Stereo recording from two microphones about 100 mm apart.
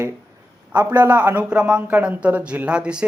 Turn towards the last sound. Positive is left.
turn(degrees=-10)  # may be behind; listen again after turning